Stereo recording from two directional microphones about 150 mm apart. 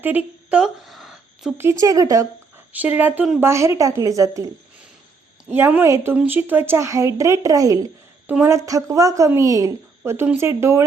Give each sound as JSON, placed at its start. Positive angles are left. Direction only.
{"t": 0.0, "sound": "a sound", "side_deg": -10}
{"t": 1.8, "sound": "speech", "side_deg": -20}
{"t": 2.7, "sound": "speech", "side_deg": -10}
{"t": 3.4, "sound": "speech", "side_deg": -20}